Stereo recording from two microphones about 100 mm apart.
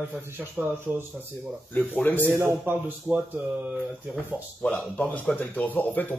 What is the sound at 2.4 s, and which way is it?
Speech, 25° right (ahead or behind).